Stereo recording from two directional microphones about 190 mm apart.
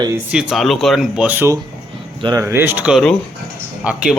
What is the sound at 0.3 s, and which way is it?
Speech, 5° right (ahead or behind).